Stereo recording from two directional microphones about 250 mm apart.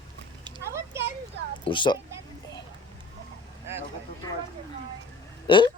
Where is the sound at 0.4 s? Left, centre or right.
Centre.